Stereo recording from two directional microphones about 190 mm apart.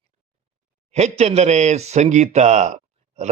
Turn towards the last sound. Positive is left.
turn(degrees=-40)  # may be behind; listen again after turning